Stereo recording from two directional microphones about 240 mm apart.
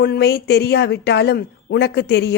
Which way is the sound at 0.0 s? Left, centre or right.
Left.